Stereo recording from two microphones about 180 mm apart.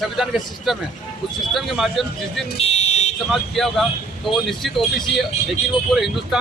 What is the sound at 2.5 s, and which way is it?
Fire alarm, 35° left (ahead or behind).